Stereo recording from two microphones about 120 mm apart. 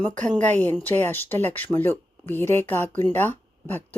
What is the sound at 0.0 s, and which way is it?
Speech, 10° left (ahead or behind).